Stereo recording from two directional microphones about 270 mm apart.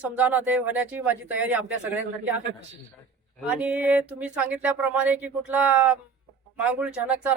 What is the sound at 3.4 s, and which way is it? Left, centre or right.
Speech, centre.